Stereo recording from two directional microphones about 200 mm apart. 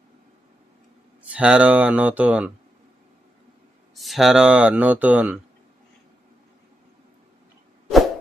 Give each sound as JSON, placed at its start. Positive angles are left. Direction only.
{"t": 1.3, "sound": "speech", "side_deg": -5}
{"t": 3.9, "sound": "speech", "side_deg": 0}